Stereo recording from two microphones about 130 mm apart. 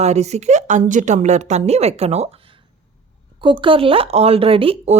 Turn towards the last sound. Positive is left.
turn(degrees=-50)  # may be behind; listen again after turning